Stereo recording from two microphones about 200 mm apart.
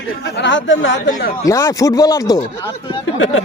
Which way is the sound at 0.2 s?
60° left (ahead or behind).